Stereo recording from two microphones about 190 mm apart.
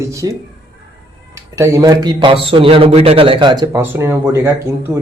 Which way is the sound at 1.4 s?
15° right (ahead or behind).